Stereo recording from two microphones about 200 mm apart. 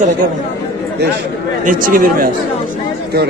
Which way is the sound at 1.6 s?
40° right (ahead or behind).